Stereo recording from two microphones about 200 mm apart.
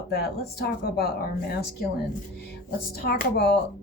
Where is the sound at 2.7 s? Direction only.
50° left (ahead or behind).